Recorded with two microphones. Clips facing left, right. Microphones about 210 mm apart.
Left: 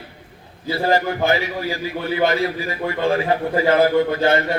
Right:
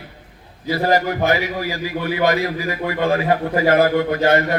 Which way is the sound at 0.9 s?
30° left (ahead or behind).